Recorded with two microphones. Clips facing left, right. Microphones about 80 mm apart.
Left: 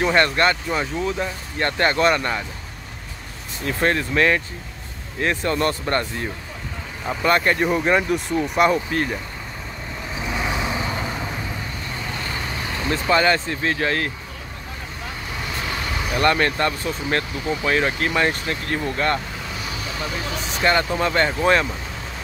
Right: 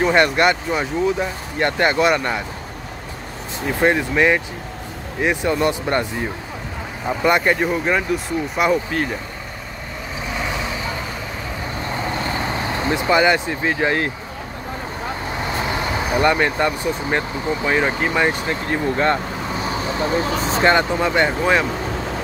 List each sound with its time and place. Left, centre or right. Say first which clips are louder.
0.1 s speech: right 3 dB; centre
3.6 s speech: right 3 dB; centre
7.1 s speech: right 2 dB; centre
7.7 s speech: left 1 dB; centre
13.1 s speech: right 2 dB; centre
15.4 s vehicle: right 5 dB; right
16.2 s speech: right 1 dB; centre
18.4 s speech: right 3 dB; right
19.5 s vehicle: right 8 dB; right
20.6 s speech: right 2 dB; right